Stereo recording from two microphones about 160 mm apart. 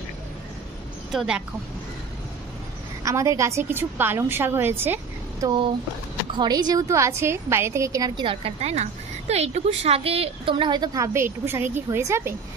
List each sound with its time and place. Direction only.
1.1 s speech: 5° right (ahead or behind)
3.0 s a woman's voice: 20° right (ahead or behind)
6.3 s a woman's voice: 25° right (ahead or behind)
8.3 s a woman's voice: 40° right (ahead or behind); by 12.4 s 15° right (ahead or behind)